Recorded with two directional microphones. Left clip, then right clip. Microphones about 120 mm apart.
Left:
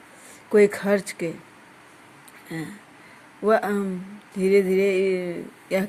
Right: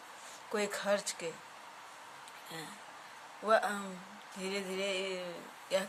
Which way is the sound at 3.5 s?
50° left (ahead or behind).